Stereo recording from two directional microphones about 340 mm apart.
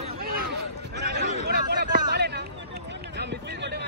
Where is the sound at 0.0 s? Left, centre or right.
Right.